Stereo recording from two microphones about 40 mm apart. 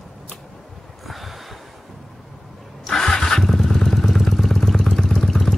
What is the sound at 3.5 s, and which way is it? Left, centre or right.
Motorcycle, centre.